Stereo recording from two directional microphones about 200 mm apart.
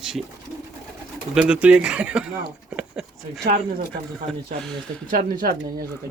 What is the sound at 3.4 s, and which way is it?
Speech, 45° right (ahead or behind).